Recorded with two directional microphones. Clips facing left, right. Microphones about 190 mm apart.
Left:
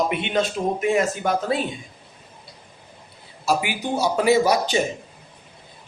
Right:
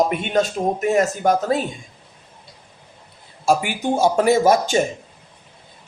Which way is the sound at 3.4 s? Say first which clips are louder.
Right 4 dB; 50° right (ahead or behind).